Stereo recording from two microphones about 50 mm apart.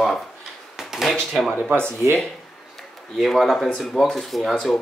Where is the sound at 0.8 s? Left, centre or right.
Centre.